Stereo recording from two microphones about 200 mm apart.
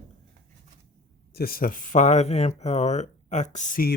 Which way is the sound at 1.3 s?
50° left (ahead or behind).